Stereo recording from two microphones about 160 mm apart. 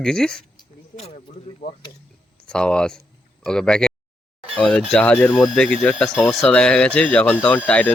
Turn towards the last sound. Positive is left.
turn(degrees=10)  # may be behind; listen again after turning